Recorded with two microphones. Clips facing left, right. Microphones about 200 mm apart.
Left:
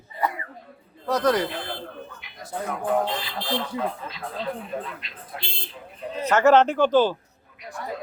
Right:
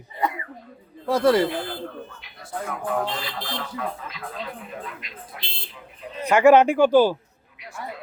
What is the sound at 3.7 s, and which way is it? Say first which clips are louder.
Speech: left 2 dB; 30° left (ahead or behind).